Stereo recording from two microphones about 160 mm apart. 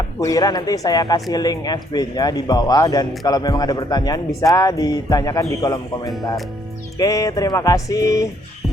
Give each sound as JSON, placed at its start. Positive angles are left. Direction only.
{"t": 0.2, "sound": "speech", "side_deg": 20}